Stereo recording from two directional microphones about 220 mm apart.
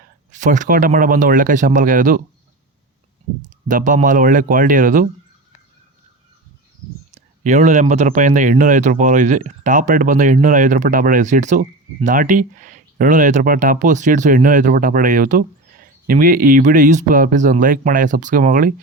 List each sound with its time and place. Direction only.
0.3 s speech: 35° right (ahead or behind)
3.7 s speech: 35° right (ahead or behind)
7.1 s speech: 30° right (ahead or behind)